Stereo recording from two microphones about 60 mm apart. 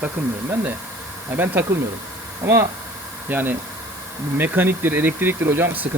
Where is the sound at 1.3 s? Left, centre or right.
Right.